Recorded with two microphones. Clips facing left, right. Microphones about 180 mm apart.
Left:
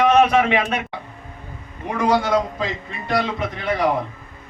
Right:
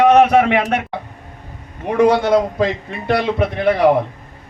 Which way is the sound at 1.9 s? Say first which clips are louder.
Right 6 dB; 60° right (ahead or behind).